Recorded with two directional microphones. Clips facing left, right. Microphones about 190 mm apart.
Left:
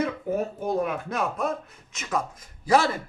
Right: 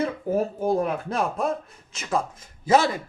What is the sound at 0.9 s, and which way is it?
Speech, 30° right (ahead or behind).